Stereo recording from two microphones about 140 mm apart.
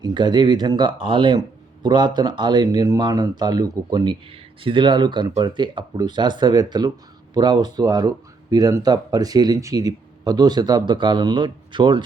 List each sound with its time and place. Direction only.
0.0 s speech: 30° right (ahead or behind)